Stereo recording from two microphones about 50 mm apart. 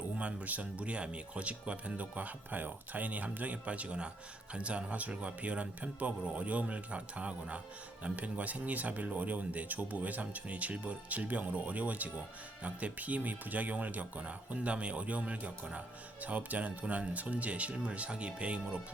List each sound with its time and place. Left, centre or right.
0.2 s speech: right